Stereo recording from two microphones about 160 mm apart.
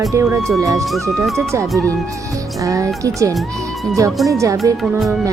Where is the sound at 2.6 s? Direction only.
20° right (ahead or behind).